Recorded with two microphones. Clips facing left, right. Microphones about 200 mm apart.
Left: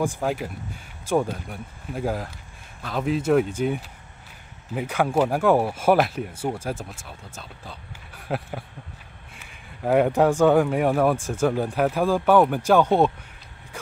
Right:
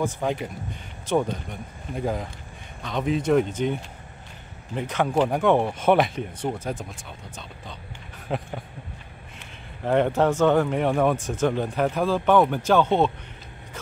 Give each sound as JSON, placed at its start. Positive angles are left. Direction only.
{"t": 0.0, "sound": "speech", "side_deg": 5}